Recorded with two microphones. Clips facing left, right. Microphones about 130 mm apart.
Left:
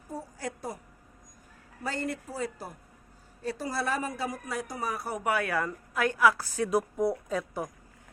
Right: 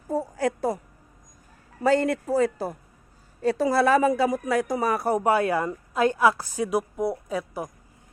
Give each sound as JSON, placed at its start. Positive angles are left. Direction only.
{"t": 0.1, "sound": "a sound", "side_deg": -90}
{"t": 1.8, "sound": "speech", "side_deg": -90}
{"t": 5.1, "sound": "a woman's voice", "side_deg": -30}